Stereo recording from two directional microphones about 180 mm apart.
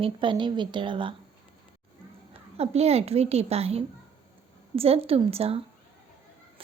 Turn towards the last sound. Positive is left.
turn(degrees=-35)  # may be behind; listen again after turning